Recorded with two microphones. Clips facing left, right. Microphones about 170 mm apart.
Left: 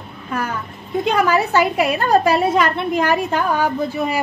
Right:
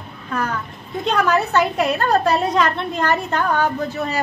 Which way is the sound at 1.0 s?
10° left (ahead or behind).